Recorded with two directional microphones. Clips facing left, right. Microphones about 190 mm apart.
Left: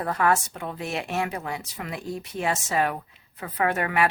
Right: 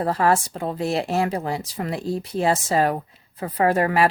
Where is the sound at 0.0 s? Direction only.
30° right (ahead or behind).